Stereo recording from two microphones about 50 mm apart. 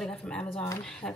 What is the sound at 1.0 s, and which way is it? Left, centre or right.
Speech, left.